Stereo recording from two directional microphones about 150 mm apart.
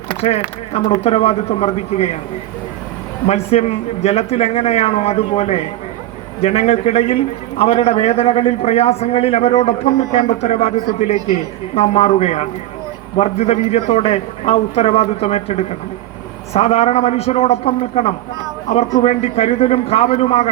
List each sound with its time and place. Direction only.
0.2 s a man's voice: 45° left (ahead or behind)
3.2 s a man's voice: 45° left (ahead or behind)